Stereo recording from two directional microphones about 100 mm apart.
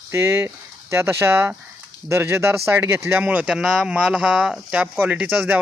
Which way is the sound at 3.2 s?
10° right (ahead or behind).